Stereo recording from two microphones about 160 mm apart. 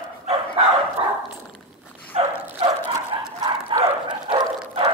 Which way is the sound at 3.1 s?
30° right (ahead or behind).